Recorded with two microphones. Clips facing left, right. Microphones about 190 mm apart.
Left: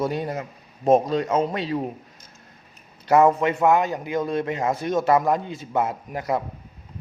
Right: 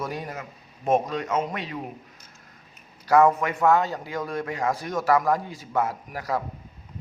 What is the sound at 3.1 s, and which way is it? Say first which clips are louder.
A man's voice: left 2 dB; 25° left (ahead or behind).